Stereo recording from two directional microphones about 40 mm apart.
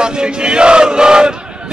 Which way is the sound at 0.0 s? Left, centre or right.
Right.